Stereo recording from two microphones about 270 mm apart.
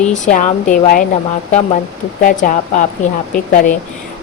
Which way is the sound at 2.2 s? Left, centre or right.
Left.